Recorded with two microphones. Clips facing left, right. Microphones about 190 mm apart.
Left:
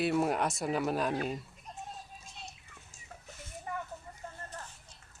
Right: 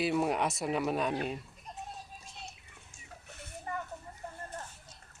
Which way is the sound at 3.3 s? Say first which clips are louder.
Even; 65° right (ahead or behind).